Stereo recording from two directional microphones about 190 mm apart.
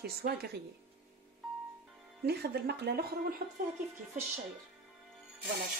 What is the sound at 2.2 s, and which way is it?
Speech, 60° right (ahead or behind).